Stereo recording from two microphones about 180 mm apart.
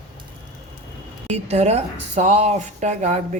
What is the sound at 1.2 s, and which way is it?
Speech, 35° right (ahead or behind).